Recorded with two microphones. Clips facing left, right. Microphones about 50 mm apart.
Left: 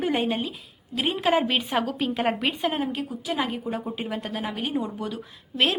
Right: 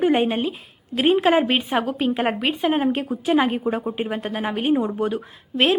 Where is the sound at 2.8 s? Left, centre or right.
Right.